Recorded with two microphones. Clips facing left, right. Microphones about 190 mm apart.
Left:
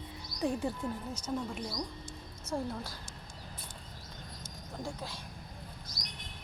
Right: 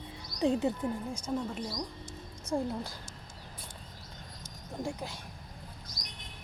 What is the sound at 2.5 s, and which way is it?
Speech, 15° right (ahead or behind).